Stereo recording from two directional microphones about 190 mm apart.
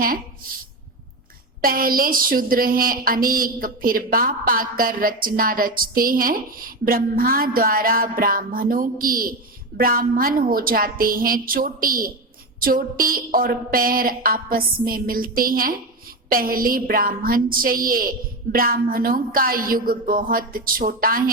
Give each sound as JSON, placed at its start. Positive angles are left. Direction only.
{"t": 1.6, "sound": "a woman's voice", "side_deg": -50}